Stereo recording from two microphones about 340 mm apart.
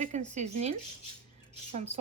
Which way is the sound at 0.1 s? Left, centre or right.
Centre.